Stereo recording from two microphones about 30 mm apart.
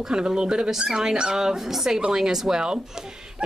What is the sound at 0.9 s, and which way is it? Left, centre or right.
Speech, right.